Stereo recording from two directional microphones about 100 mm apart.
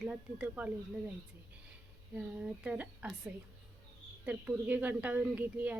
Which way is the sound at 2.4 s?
10° right (ahead or behind).